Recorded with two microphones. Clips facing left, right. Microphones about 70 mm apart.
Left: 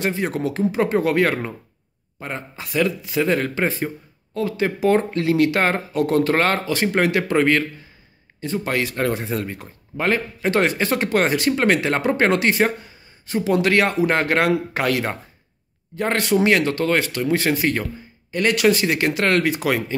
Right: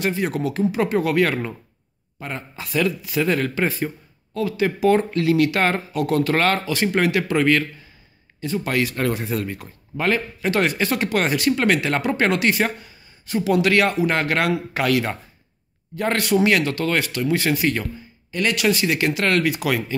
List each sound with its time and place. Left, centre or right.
0.0 s speech: left